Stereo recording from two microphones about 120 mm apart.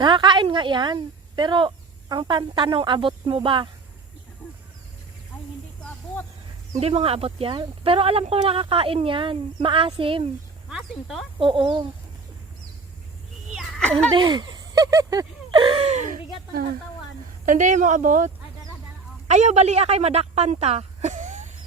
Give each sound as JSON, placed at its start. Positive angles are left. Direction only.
{"t": 0.0, "sound": "speech", "side_deg": -40}
{"t": 6.7, "sound": "speech", "side_deg": -55}
{"t": 10.7, "sound": "speech", "side_deg": -5}
{"t": 11.3, "sound": "speech", "side_deg": -45}
{"t": 13.5, "sound": "a sound", "side_deg": 0}
{"t": 14.2, "sound": "a sound", "side_deg": -35}
{"t": 15.9, "sound": "speech", "side_deg": -80}
{"t": 17.4, "sound": "speech", "side_deg": -90}
{"t": 19.3, "sound": "speech", "side_deg": -70}